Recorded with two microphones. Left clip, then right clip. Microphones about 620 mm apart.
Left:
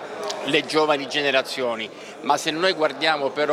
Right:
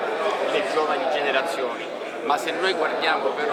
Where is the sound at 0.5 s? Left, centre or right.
Left.